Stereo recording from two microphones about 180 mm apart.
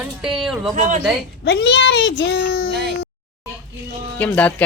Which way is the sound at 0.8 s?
40° right (ahead or behind).